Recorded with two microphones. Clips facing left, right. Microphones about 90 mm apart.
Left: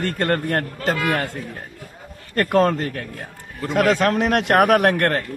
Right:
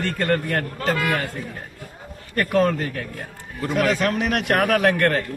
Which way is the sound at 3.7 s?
65° left (ahead or behind).